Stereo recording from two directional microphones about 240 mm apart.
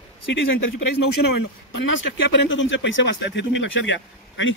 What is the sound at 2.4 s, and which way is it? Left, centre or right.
Speech, left.